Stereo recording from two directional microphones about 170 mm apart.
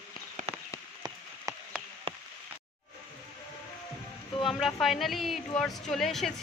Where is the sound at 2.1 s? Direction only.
35° right (ahead or behind).